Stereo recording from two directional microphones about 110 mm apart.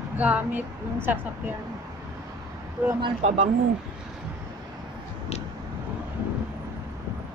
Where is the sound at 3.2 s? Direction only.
85° right.